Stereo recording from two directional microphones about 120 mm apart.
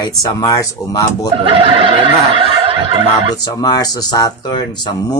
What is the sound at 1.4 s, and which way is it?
Fowl, 50° right (ahead or behind).